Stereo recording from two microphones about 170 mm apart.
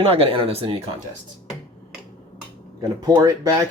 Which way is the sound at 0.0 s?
35° right (ahead or behind).